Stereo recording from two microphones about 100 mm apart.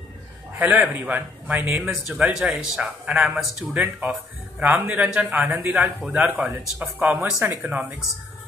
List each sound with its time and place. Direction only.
0.6 s a man's voice: 20° right (ahead or behind)
3.7 s a man's voice: 20° right (ahead or behind)